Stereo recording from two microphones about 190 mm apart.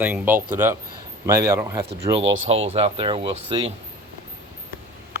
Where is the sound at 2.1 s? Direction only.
80° right.